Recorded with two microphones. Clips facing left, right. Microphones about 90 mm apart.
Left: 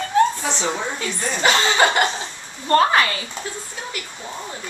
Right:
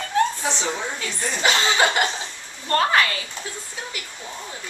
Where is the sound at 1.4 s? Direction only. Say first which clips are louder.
Left 3 dB; 40° left (ahead or behind).